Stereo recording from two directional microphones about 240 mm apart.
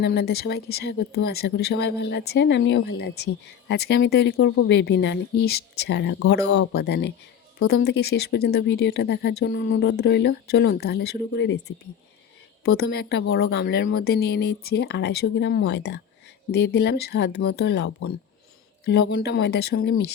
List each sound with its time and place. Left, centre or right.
0.0 s speech: left
12.6 s speech: left